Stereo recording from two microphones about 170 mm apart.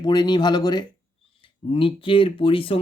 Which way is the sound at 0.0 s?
25° left (ahead or behind).